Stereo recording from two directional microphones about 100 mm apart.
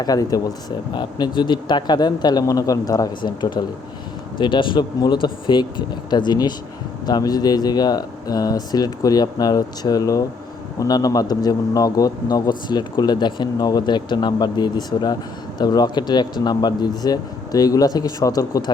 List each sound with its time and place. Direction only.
0.0 s a man's voice: 40° left (ahead or behind)
0.9 s a man's voice: 50° left (ahead or behind)